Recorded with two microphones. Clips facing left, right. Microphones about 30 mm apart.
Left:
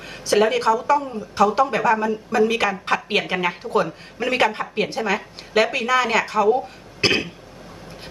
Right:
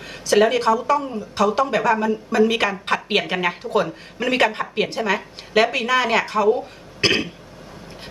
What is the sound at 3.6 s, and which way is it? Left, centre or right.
Speech, left.